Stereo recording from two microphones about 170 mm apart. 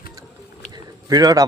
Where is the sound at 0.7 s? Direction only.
20° right (ahead or behind).